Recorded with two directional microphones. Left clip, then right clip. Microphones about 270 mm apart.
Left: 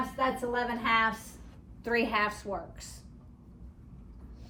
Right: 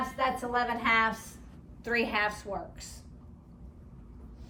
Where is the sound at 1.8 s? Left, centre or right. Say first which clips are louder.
Even; centre.